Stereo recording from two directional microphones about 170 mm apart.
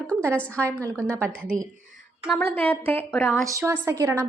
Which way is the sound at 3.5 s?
15° right (ahead or behind).